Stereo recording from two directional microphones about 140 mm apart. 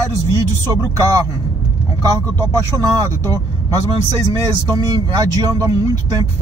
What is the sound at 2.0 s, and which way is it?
Speech, 25° right (ahead or behind).